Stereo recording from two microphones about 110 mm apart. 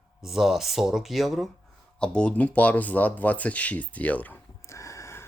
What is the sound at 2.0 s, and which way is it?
Speech, 10° left (ahead or behind).